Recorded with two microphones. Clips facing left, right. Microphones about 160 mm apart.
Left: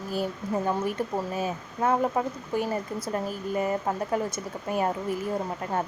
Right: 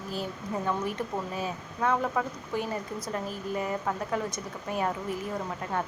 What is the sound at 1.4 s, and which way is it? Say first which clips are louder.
Speech: left 3 dB; 35° left (ahead or behind).